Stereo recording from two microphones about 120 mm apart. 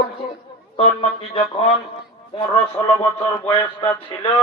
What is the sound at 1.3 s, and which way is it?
A man's voice, 50° left (ahead or behind).